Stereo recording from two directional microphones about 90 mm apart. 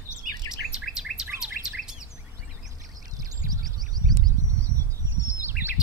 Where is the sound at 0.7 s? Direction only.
10° right (ahead or behind).